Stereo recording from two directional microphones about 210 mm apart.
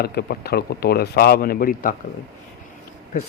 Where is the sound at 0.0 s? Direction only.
50° left (ahead or behind).